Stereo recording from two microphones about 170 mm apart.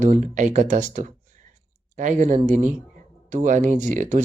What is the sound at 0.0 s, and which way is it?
Speech, 45° right (ahead or behind).